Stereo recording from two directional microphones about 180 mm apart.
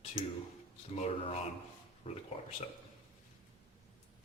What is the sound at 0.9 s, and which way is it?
Speech, 35° left (ahead or behind).